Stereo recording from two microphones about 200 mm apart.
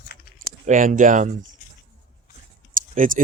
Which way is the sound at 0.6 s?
40° right (ahead or behind).